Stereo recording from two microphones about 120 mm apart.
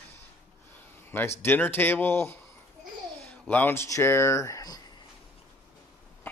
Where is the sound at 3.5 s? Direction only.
20° left (ahead or behind).